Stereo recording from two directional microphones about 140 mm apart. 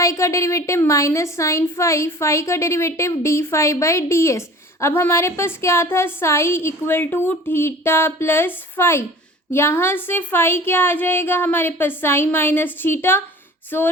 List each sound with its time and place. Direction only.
0.0 s a woman's voice: 20° left (ahead or behind)